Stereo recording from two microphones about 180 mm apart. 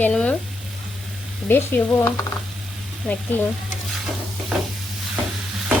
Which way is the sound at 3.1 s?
5° left (ahead or behind).